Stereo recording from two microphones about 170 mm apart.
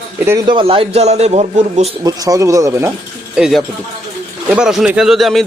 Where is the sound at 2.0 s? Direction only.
20° right (ahead or behind).